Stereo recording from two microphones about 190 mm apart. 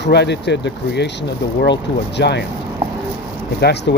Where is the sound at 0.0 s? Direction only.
60° left (ahead or behind).